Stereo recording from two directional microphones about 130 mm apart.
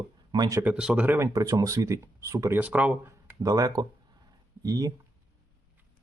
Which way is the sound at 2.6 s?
10° right (ahead or behind).